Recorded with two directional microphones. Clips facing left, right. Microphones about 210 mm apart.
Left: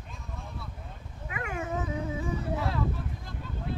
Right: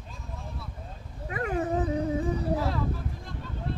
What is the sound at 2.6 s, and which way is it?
Vehicle, centre (ahead or behind).